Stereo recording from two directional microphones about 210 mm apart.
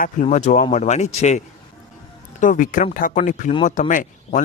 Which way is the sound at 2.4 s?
40° left (ahead or behind).